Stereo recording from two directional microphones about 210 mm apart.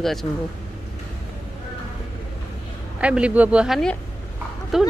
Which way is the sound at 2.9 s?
5° right (ahead or behind).